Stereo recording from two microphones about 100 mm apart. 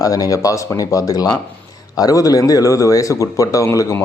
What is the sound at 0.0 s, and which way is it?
Speech, 35° left (ahead or behind).